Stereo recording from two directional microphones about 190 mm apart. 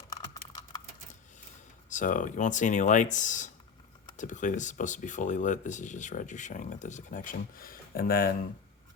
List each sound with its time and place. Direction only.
1.9 s speech: 40° left (ahead or behind)